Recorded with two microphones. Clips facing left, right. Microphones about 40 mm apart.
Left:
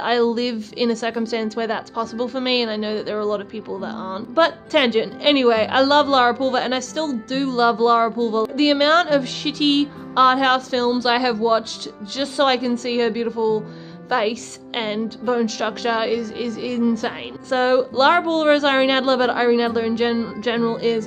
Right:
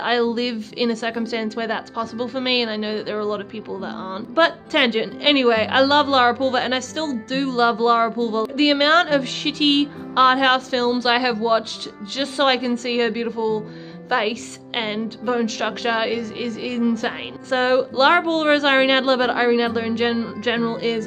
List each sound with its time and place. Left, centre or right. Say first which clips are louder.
0.0 s a woman's voice: left 1 dB; centre